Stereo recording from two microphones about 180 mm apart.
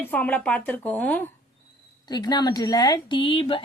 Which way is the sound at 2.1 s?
25° left (ahead or behind).